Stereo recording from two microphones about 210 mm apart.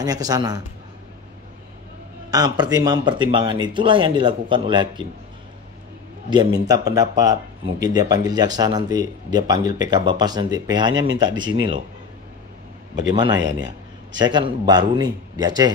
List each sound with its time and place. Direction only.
0.0 s speech: 15° right (ahead or behind)
2.3 s speech: 20° right (ahead or behind)
6.3 s speech: 20° right (ahead or behind)
13.1 s speech: 20° right (ahead or behind)
13.4 s a man's voice: 60° right (ahead or behind)
14.2 s speech: 20° right (ahead or behind)